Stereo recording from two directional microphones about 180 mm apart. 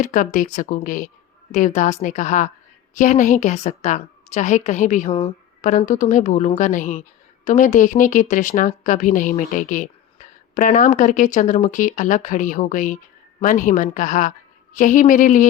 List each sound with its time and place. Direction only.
0.0 s speech: 45° left (ahead or behind)